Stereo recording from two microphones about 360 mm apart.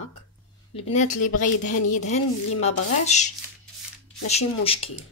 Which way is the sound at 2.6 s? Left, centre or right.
Centre.